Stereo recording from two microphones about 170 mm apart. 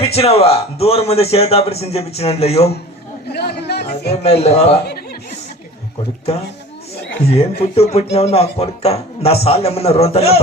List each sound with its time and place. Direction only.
0.0 s speech: 35° left (ahead or behind)
3.3 s speech: 75° left (ahead or behind)
4.1 s speech: 35° left (ahead or behind)
7.3 s speech: 35° left (ahead or behind)